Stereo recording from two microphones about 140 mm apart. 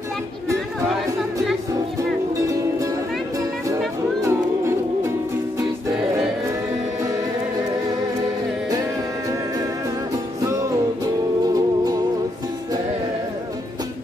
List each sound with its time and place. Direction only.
2.3 s music: 25° right (ahead or behind)
11.4 s music: 25° right (ahead or behind)